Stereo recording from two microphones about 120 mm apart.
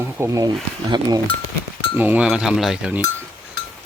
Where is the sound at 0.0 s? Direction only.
25° right (ahead or behind).